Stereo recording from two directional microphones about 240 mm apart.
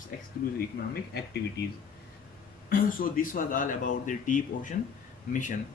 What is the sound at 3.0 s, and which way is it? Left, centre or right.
Speech, left.